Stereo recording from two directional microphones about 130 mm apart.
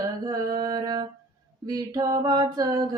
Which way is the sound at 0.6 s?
30° right (ahead or behind).